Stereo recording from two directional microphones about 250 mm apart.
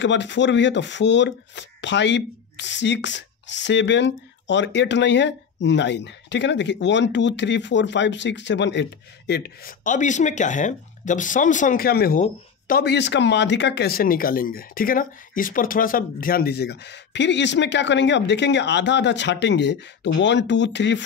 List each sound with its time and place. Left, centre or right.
0.0 s speech: left